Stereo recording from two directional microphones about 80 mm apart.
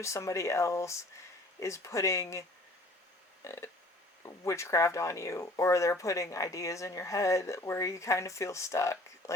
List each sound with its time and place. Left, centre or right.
0.0 s speech: left
3.4 s a sound: left
4.4 s speech: left